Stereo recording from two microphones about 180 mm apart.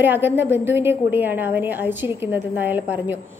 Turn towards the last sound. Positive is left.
turn(degrees=-10)  # may be behind; listen again after turning